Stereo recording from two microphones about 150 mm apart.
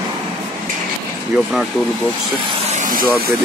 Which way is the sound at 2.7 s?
65° right (ahead or behind).